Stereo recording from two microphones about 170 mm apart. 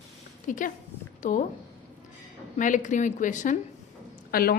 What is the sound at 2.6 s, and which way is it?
Speech, 50° left (ahead or behind).